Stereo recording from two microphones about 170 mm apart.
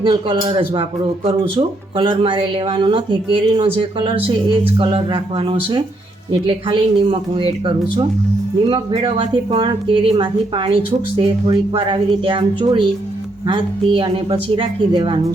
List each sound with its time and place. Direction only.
0.0 s a woman's voice: 30° right (ahead or behind)